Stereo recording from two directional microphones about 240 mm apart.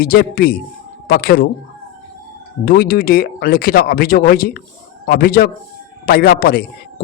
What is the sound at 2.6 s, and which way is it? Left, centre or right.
A man's voice, left.